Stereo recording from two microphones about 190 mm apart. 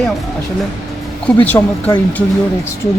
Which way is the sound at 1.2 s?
10° left (ahead or behind).